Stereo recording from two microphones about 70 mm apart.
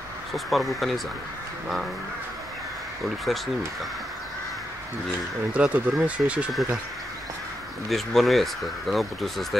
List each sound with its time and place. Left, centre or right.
0.3 s speech: centre
3.3 s speech: centre
5.5 s speech: centre
7.9 s speech: centre